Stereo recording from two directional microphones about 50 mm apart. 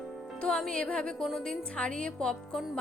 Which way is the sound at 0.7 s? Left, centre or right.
Centre.